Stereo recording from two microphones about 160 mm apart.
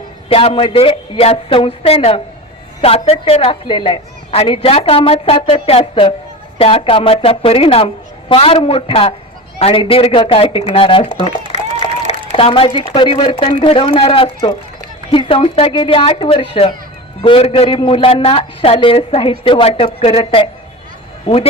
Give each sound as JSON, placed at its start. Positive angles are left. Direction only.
{"t": 0.3, "sound": "a woman's voice", "side_deg": 35}
{"t": 10.7, "sound": "a sound", "side_deg": 30}
{"t": 12.3, "sound": "a woman's voice", "side_deg": 35}